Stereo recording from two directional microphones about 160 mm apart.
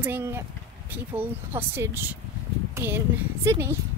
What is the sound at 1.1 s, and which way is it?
Speech, 15° right (ahead or behind).